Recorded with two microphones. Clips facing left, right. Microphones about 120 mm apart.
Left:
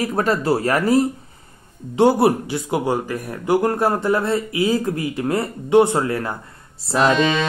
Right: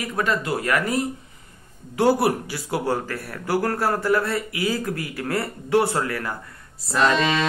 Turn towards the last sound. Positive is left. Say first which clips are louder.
# left 3 dB
turn(degrees=0)  # may be behind; listen again after turning